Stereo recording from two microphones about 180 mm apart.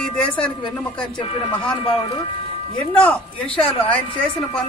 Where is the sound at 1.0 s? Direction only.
25° left (ahead or behind).